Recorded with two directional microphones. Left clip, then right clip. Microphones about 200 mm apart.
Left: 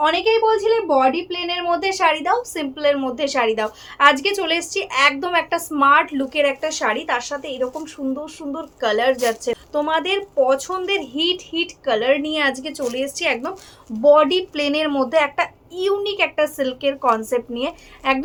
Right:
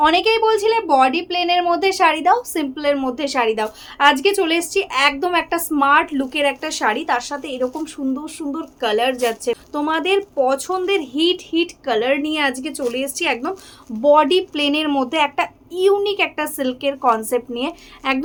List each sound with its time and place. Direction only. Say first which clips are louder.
0.0 s speech: right 2 dB; 25° right (ahead or behind)